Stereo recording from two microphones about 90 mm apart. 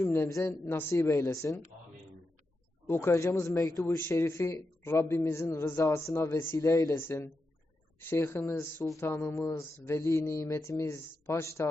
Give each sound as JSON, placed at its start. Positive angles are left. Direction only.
{"t": 0.0, "sound": "speech", "side_deg": 25}
{"t": 0.3, "sound": "speech", "side_deg": 35}
{"t": 0.6, "sound": "speech", "side_deg": 25}
{"t": 0.9, "sound": "speech", "side_deg": 40}
{"t": 2.8, "sound": "speech", "side_deg": 25}
{"t": 7.0, "sound": "speech", "side_deg": 25}